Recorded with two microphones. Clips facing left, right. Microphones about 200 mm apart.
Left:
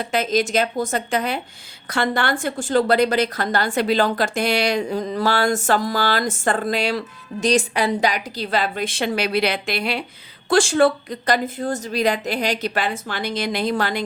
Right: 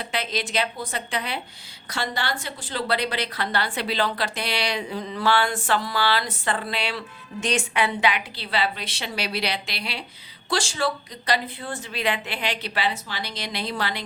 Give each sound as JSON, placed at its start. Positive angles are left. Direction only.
{"t": 0.0, "sound": "a woman's voice", "side_deg": 45}